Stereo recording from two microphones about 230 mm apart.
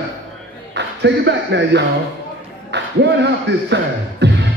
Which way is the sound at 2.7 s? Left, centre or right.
Right.